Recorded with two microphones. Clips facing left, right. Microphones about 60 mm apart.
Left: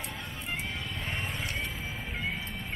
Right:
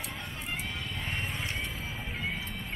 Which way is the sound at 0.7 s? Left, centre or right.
Centre.